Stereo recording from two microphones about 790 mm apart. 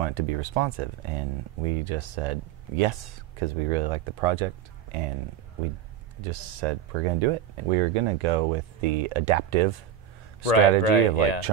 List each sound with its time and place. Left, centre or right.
0.0 s speech: right
6.2 s speech: right
10.4 s speech: left